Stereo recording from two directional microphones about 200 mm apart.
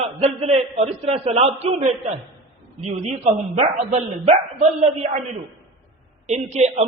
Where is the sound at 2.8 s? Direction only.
35° right (ahead or behind).